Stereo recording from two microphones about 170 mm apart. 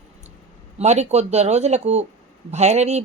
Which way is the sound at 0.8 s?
40° right (ahead or behind).